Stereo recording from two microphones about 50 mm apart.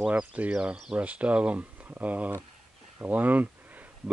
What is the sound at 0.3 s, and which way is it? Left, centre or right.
Speech, right.